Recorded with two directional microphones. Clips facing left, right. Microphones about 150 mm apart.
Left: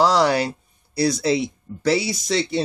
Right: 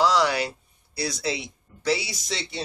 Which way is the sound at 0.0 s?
40° left (ahead or behind).